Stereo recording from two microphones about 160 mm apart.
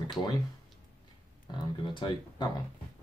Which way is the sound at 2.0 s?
30° left (ahead or behind).